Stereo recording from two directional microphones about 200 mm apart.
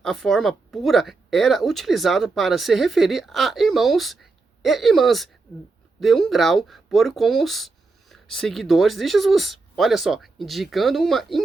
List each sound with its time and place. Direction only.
0.0 s speech: centre (ahead or behind)